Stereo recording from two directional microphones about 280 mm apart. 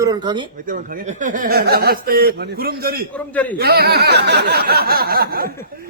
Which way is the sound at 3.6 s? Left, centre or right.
Right.